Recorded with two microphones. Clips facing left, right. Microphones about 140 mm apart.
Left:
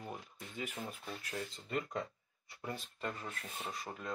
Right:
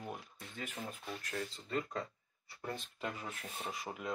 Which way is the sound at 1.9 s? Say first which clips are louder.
Left 1 dB; 20° left (ahead or behind).